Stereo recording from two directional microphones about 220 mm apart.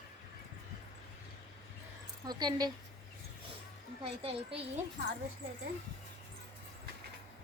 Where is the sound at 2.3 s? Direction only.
20° right (ahead or behind).